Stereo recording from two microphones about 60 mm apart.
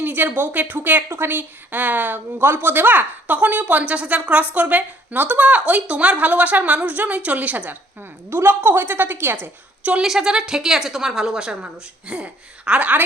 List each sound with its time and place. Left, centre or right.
0.0 s speech: right
8.3 s a woman's voice: right
10.0 s a woman's voice: centre; by 13.1 s right